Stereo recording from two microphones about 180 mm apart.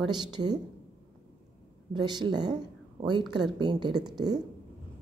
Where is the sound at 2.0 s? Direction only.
25° right (ahead or behind).